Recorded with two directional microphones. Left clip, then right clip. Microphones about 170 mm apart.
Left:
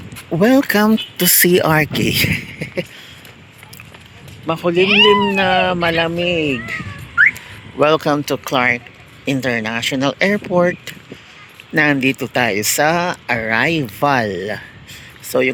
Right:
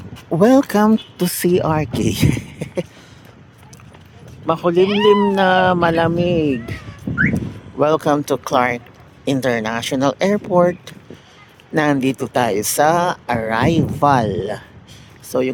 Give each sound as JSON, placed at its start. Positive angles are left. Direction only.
{"t": 0.3, "sound": "speech", "side_deg": -25}
{"t": 1.9, "sound": "speech", "side_deg": -20}
{"t": 4.4, "sound": "speech", "side_deg": -35}
{"t": 7.8, "sound": "speech", "side_deg": -15}
{"t": 15.3, "sound": "speech", "side_deg": -5}